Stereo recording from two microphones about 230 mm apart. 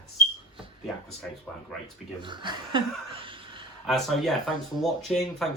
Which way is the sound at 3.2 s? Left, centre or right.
Right.